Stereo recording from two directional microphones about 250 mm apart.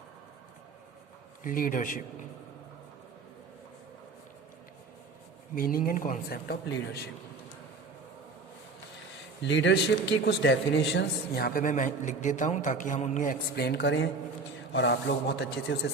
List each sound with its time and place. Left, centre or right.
1.5 s a man's voice: left
5.5 s a man's voice: left
9.4 s a man's voice: left